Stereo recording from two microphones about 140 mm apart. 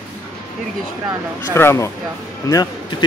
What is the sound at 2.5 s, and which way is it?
Speech, 30° left (ahead or behind).